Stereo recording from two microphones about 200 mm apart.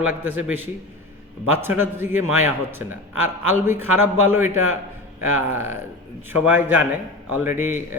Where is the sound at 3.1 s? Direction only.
90° right.